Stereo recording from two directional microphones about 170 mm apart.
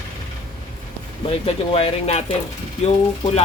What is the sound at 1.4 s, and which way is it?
Speech, 35° left (ahead or behind).